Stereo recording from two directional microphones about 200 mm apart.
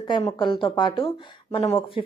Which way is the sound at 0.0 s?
25° left (ahead or behind).